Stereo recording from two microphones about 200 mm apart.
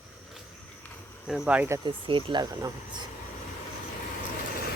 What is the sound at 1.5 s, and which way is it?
Speech, 10° right (ahead or behind).